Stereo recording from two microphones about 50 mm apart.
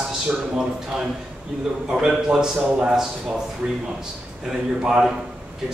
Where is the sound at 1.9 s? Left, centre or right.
Centre.